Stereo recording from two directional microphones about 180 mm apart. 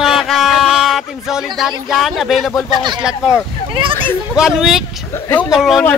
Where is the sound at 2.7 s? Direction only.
25° right (ahead or behind).